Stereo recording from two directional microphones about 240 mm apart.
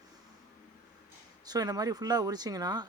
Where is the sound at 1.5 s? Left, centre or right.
Centre.